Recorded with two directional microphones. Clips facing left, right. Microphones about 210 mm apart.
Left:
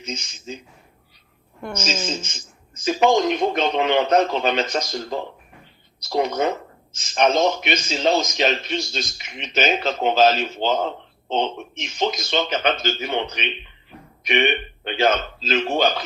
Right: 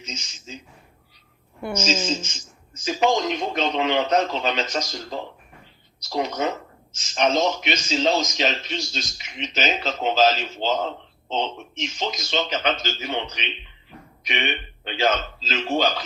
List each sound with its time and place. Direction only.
0.0 s speech: 55° left (ahead or behind)
1.8 s speech: 55° left (ahead or behind)